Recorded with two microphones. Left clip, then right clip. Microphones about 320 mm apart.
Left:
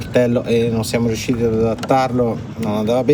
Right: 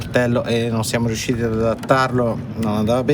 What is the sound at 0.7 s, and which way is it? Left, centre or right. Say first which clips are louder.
Speech: left 2 dB; centre.